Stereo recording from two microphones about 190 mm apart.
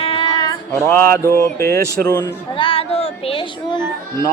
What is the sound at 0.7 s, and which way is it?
Mantra, 10° left (ahead or behind).